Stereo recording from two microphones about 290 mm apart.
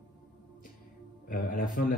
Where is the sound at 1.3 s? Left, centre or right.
Left.